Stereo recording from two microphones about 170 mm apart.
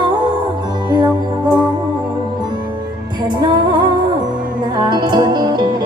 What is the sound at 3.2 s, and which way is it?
Music, 25° right (ahead or behind).